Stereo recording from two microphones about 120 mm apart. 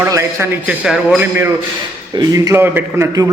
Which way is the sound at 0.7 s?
10° right (ahead or behind).